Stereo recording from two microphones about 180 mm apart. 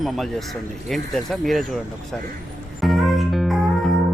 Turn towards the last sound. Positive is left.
turn(degrees=0)  # may be behind; listen again after turning